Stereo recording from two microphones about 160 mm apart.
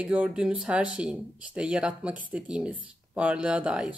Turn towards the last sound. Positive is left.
turn(degrees=-5)  # may be behind; listen again after turning